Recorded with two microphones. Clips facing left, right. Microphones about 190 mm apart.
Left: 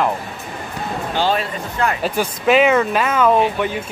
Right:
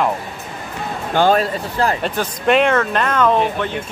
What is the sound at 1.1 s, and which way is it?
Speech, 50° right (ahead or behind).